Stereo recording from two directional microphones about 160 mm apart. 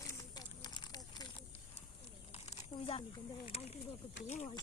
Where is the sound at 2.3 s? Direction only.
45° left (ahead or behind).